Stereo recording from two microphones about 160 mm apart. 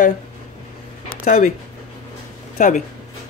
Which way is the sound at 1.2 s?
50° left (ahead or behind).